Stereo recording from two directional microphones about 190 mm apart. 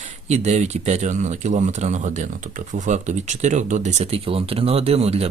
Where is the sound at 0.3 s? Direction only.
35° right (ahead or behind).